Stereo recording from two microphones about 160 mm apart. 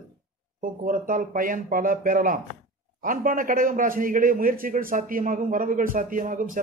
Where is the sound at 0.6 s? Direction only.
55° right (ahead or behind).